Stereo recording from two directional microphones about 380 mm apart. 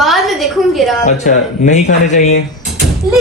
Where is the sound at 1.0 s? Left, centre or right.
Centre.